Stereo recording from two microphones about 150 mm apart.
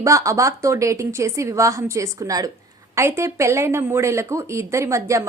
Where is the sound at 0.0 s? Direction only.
20° right (ahead or behind).